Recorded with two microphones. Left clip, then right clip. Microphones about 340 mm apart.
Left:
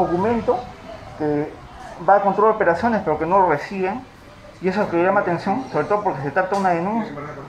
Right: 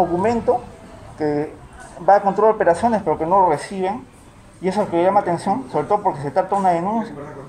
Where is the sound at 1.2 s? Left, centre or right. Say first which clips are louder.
Right 1 dB; right.